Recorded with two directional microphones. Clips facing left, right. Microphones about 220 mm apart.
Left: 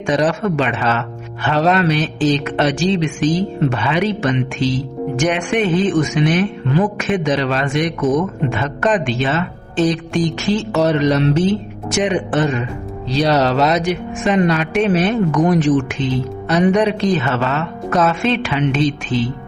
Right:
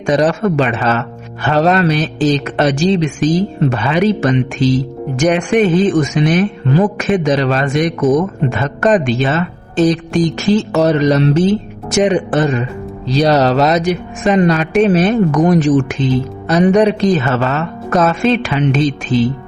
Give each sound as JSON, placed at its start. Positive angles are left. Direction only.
{"t": 0.0, "sound": "speech", "side_deg": -40}